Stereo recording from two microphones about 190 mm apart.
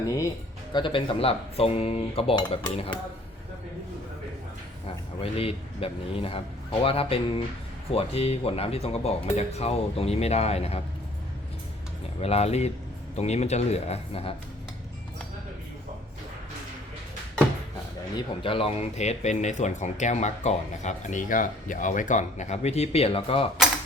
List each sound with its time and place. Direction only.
0.0 s speech: 15° left (ahead or behind)
0.7 s cutlery: 25° left (ahead or behind)
5.2 s cutlery: 30° left (ahead or behind)
7.9 s speech: 30° left (ahead or behind)
12.2 s speech: 35° left (ahead or behind)
18.4 s speech: 30° left (ahead or behind)